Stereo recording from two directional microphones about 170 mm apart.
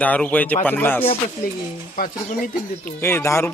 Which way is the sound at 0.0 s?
10° left (ahead or behind).